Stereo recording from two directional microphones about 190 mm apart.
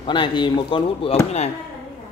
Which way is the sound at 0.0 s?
25° left (ahead or behind).